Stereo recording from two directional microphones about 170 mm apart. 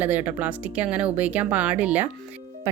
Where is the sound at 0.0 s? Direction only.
10° right (ahead or behind).